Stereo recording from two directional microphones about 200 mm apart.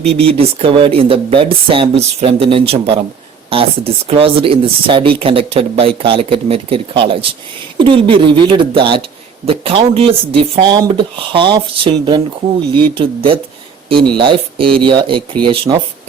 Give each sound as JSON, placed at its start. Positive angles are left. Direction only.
{"t": 0.1, "sound": "speech", "side_deg": -30}